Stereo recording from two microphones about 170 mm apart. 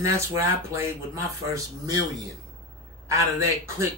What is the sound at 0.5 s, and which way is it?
Speech, 15° right (ahead or behind).